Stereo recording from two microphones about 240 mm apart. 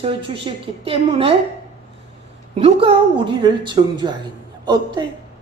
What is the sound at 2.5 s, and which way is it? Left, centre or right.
A woman's voice, right.